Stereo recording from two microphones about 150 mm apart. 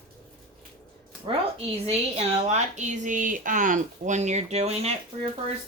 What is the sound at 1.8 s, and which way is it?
Speech, 45° right (ahead or behind).